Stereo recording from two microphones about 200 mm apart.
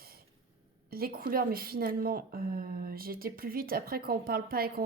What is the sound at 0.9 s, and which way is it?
Speech, 50° right (ahead or behind).